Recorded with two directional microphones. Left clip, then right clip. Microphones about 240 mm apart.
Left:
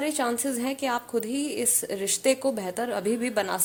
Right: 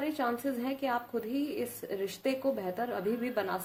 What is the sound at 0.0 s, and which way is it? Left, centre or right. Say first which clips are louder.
A woman's voice: left 5 dB; left.